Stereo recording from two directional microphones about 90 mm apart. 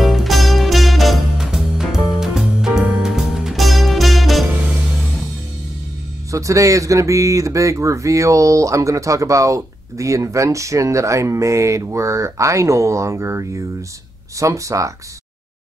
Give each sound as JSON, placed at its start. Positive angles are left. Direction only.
{"t": 0.0, "sound": "music", "side_deg": 0}
{"t": 6.3, "sound": "speech", "side_deg": -35}